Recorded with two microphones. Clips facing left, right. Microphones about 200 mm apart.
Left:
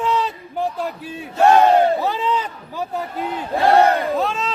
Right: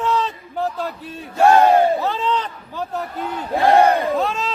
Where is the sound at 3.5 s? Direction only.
15° right (ahead or behind).